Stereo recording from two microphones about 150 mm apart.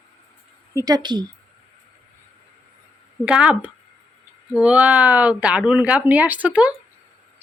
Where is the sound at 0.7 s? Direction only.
25° right (ahead or behind).